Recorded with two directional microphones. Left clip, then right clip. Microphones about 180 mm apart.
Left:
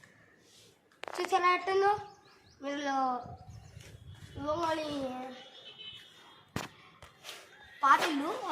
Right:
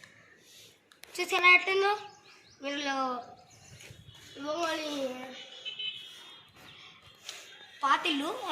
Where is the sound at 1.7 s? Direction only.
10° right (ahead or behind).